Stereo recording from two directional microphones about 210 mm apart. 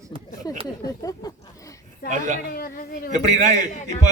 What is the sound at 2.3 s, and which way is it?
Speech, 45° left (ahead or behind).